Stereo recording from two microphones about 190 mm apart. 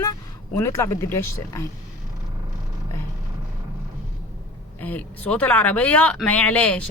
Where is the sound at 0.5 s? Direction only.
15° left (ahead or behind).